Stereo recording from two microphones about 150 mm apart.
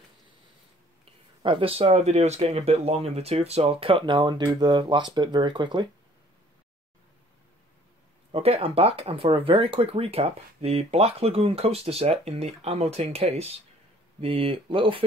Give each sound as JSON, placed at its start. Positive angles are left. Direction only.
{"t": 1.0, "sound": "speech", "side_deg": -35}
{"t": 8.3, "sound": "speech", "side_deg": -40}